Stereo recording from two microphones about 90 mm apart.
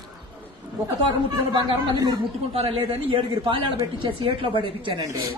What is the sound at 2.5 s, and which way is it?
Speech, 90° right.